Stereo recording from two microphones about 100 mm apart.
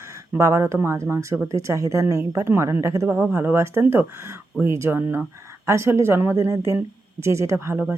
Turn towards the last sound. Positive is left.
turn(degrees=-30)  # may be behind; listen again after turning